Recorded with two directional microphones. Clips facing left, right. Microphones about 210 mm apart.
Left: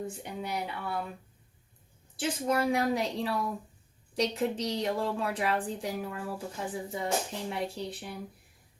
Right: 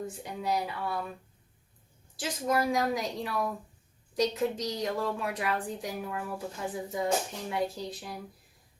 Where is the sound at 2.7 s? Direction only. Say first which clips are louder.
Left 1 dB; 30° left (ahead or behind).